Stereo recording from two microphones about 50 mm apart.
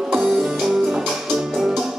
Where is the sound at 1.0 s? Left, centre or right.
Centre.